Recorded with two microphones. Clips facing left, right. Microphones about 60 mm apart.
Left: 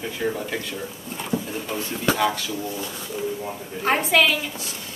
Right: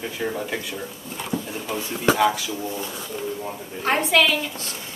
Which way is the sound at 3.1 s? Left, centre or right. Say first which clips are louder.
Left 2 dB; centre.